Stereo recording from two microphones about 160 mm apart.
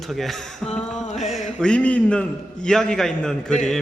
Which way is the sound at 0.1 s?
Centre (ahead or behind).